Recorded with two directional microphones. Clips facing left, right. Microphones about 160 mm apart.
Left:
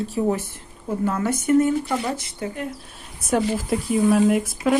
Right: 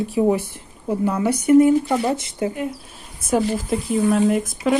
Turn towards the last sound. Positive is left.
turn(degrees=0)  # may be behind; listen again after turning